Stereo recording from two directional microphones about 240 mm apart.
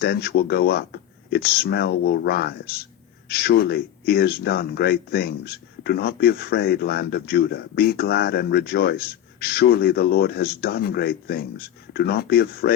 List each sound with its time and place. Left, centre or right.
0.0 s speech: left